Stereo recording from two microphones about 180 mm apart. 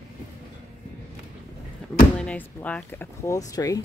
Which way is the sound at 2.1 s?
5° left (ahead or behind).